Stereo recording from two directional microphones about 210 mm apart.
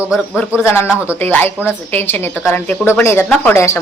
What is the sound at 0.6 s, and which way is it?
A woman's voice, 10° left (ahead or behind).